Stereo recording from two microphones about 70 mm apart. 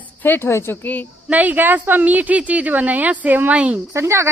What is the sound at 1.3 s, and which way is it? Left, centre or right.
A woman's voice, right.